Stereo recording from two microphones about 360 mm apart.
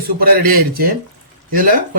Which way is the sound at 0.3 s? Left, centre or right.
Right.